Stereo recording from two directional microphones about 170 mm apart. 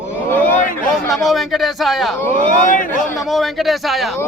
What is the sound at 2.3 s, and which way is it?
Speech, 50° left (ahead or behind).